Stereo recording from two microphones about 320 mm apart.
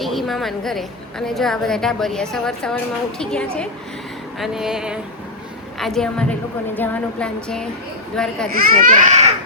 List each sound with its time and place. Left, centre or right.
0.0 s a woman's voice: centre
8.5 s speech: right